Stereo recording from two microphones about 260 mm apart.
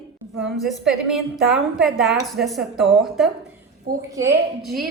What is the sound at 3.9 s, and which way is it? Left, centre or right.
Speech, right.